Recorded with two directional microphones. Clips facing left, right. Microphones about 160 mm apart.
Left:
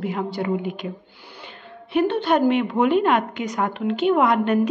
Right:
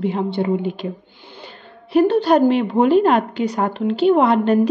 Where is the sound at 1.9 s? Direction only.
35° right (ahead or behind).